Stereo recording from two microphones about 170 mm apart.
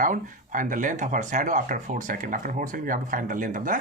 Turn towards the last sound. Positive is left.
turn(degrees=-50)  # may be behind; listen again after turning